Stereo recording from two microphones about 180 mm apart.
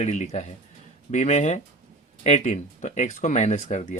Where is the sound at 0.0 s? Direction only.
40° left (ahead or behind).